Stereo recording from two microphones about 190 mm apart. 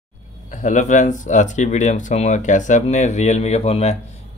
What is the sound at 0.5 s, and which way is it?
Speech, 40° left (ahead or behind).